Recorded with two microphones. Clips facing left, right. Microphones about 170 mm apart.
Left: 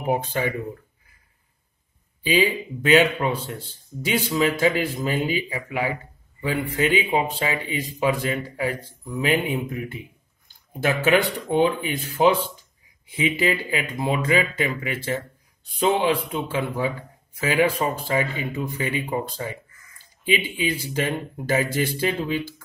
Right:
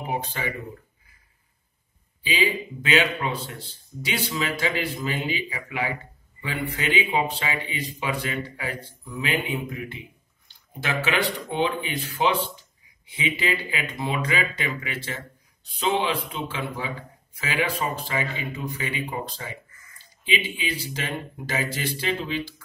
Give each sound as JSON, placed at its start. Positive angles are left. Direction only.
{"t": 2.2, "sound": "a man's voice", "side_deg": 50}